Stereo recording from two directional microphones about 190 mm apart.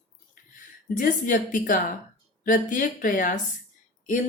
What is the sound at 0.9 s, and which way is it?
A woman's voice, 45° left (ahead or behind).